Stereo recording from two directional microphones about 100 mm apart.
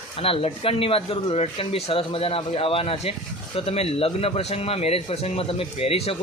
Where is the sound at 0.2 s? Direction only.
70° left (ahead or behind).